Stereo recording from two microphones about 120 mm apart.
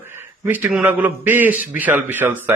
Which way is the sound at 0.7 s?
10° right (ahead or behind).